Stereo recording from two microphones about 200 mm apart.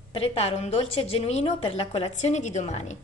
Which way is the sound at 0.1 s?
25° left (ahead or behind).